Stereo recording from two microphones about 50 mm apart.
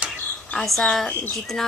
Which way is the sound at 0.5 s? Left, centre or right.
Centre.